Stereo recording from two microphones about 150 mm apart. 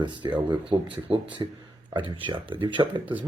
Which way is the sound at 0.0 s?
30° right (ahead or behind).